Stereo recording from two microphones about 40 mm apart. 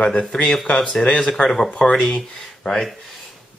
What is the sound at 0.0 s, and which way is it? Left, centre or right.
Speech, left.